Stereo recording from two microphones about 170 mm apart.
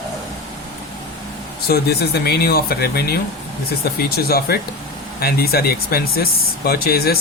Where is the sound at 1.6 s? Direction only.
65° left (ahead or behind).